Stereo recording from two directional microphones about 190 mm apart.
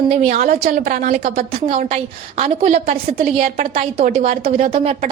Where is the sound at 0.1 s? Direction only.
35° right (ahead or behind).